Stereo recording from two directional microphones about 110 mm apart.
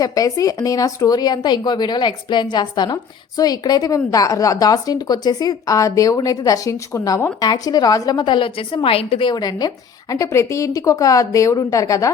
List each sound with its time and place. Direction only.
0.0 s a woman's voice: 35° left (ahead or behind); by 9.3 s 60° left (ahead or behind)
9.3 s speech: 35° left (ahead or behind)